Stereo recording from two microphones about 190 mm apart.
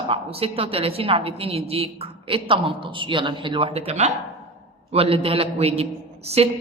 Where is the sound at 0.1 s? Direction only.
30° right (ahead or behind).